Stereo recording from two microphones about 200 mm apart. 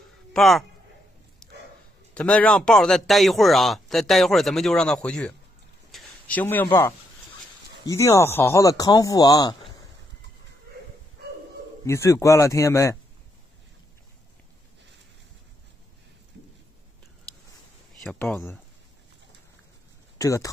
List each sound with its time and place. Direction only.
0.3 s speech: centre (ahead or behind)
1.4 s dog: centre (ahead or behind)
2.1 s a man's voice: 5° left (ahead or behind)
5.9 s a sound: 5° left (ahead or behind)
7.8 s speech: 15° left (ahead or behind)
11.8 s speech: 15° left (ahead or behind)
18.0 s a man's voice: 5° left (ahead or behind)
20.2 s speech: 15° left (ahead or behind)